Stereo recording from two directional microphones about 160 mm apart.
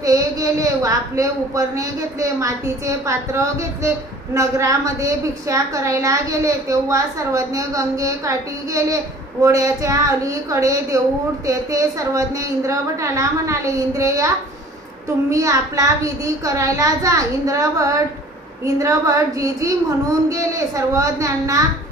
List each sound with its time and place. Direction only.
0.0 s a woman's voice: 20° right (ahead or behind)